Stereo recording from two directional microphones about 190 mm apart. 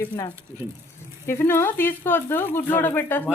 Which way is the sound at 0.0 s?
10° left (ahead or behind).